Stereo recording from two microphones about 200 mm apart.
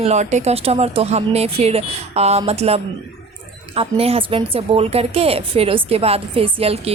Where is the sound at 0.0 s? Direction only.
35° right (ahead or behind).